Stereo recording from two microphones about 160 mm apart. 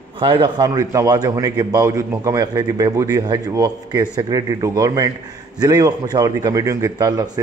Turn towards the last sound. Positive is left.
turn(degrees=-25)  # may be behind; listen again after turning